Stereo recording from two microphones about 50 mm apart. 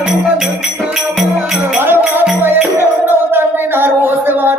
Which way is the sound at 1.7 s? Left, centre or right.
Right.